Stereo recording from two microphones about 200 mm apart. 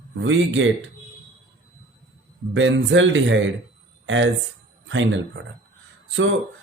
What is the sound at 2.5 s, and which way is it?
Speech, 70° right (ahead or behind).